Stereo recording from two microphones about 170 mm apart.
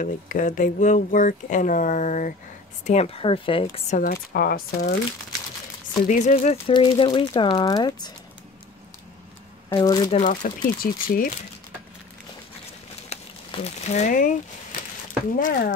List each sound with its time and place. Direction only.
0.0 s speech: 50° left (ahead or behind); by 3.8 s 35° left (ahead or behind)
3.9 s speech: 55° left (ahead or behind)
6.0 s speech: 45° left (ahead or behind)
6.7 s speech: 30° left (ahead or behind)
9.7 s speech: 25° left (ahead or behind)
10.1 s speech: 45° left (ahead or behind)
10.8 s speech: 55° left (ahead or behind)
13.1 s speech: 40° left (ahead or behind)
15.3 s speech: 55° left (ahead or behind)